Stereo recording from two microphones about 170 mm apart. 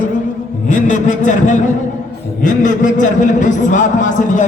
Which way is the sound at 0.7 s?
50° left (ahead or behind).